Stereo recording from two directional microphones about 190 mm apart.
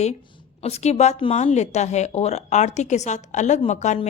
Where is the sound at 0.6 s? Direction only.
35° left (ahead or behind).